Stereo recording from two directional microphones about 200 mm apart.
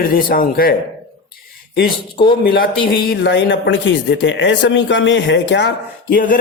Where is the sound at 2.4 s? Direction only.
50° left (ahead or behind).